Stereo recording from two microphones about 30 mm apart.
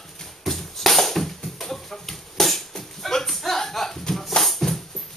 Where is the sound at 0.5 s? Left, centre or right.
Centre.